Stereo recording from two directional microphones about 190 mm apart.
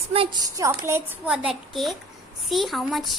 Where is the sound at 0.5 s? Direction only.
15° right (ahead or behind).